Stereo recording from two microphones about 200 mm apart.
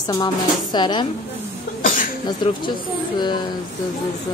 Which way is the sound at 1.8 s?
40° left (ahead or behind).